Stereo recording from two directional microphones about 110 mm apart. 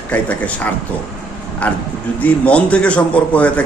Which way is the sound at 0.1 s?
15° left (ahead or behind).